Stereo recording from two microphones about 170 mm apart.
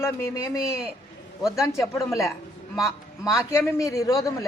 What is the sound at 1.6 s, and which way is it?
A woman's voice, 15° left (ahead or behind).